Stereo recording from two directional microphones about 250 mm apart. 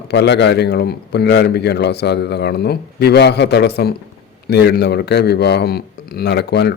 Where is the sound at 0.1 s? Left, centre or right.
Left.